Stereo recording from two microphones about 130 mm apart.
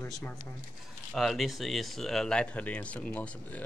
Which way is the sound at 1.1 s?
Centre (ahead or behind).